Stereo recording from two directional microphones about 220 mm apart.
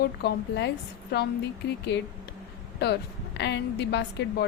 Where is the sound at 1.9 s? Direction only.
50° left (ahead or behind).